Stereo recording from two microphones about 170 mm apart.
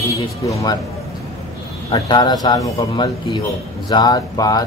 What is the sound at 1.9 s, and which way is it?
A man's voice, 25° left (ahead or behind).